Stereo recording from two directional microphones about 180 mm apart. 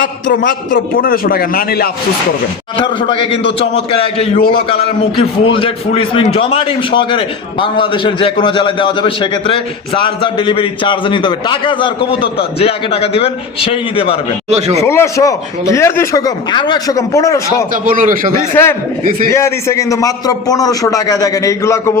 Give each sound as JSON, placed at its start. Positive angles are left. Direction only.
{"t": 0.0, "sound": "a man's voice", "side_deg": 50}
{"t": 2.7, "sound": "a man's voice", "side_deg": 30}
{"t": 14.5, "sound": "a man's voice", "side_deg": -35}
{"t": 14.8, "sound": "speech", "side_deg": 15}
{"t": 17.8, "sound": "a man's voice", "side_deg": -50}
{"t": 18.5, "sound": "a man's voice", "side_deg": 10}